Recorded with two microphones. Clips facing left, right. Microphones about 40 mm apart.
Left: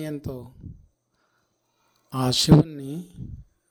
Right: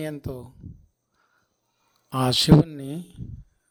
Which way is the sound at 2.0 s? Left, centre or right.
Centre.